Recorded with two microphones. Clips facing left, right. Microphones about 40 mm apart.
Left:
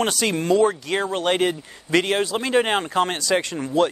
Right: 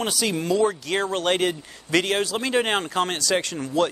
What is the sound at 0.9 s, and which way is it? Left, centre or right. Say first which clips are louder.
Speech: left 1 dB; centre.